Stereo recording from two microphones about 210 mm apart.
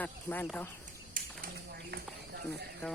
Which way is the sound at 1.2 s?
40° right (ahead or behind).